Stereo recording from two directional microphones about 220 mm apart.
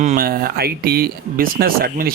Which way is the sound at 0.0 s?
35° right (ahead or behind).